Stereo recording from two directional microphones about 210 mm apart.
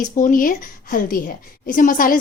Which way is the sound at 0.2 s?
40° left (ahead or behind).